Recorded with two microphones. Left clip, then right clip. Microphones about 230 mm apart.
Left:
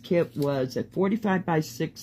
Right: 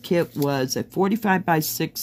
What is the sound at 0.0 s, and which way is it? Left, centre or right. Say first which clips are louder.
Speech: right 3 dB; right.